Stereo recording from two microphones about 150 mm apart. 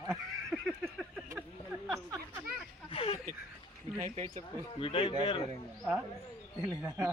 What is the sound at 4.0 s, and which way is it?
Speech, 55° right (ahead or behind).